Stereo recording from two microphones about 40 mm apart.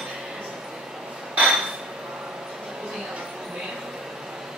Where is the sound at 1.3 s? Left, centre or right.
Right.